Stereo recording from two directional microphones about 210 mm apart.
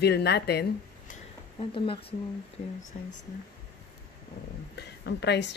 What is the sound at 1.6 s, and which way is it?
Speech, 25° left (ahead or behind).